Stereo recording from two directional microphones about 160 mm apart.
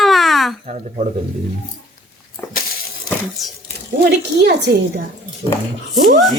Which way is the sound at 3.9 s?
80° right.